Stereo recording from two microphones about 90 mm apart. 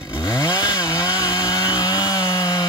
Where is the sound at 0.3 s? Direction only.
45° left (ahead or behind).